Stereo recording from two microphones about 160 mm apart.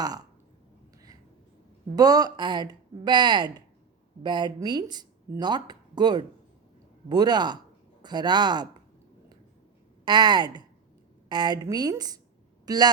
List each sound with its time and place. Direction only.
2.0 s speech: 25° right (ahead or behind)
10.1 s speech: 25° right (ahead or behind)